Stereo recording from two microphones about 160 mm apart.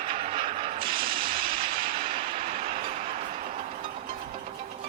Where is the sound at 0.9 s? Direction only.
35° right (ahead or behind).